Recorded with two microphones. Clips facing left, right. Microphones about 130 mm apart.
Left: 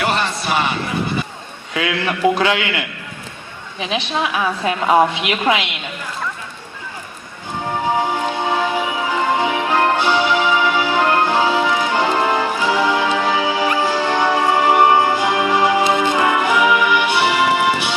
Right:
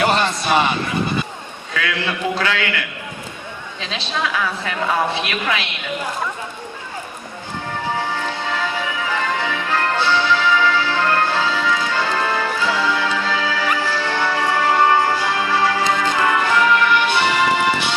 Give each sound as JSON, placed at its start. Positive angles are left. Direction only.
{"t": 1.7, "sound": "a woman's voice", "side_deg": 20}
{"t": 7.9, "sound": "music", "side_deg": 15}